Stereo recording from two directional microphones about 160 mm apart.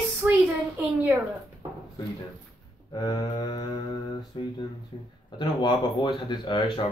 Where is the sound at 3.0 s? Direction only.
25° left (ahead or behind).